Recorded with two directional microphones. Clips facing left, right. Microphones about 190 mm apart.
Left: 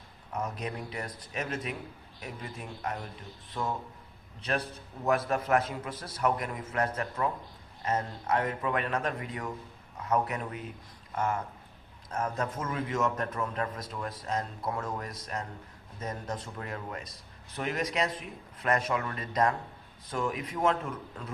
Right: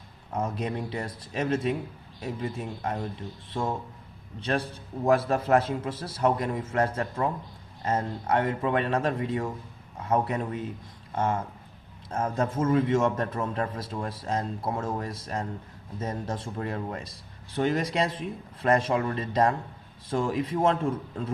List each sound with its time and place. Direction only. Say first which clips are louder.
0.3 s a man's voice: right 5 dB; 25° right (ahead or behind)